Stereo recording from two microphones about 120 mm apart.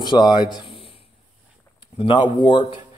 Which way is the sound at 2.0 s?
40° left (ahead or behind).